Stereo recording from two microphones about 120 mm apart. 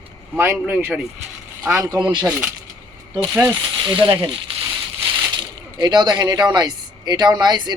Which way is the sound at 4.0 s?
40° right (ahead or behind).